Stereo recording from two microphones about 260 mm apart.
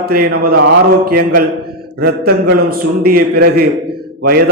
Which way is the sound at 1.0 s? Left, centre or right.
Right.